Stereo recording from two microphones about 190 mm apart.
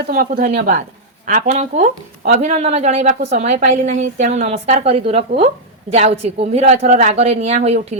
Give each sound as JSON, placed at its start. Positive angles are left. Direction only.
{"t": 0.1, "sound": "a woman's voice", "side_deg": -50}